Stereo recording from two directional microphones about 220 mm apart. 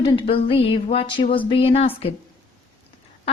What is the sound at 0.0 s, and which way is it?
A woman's voice, 25° left (ahead or behind).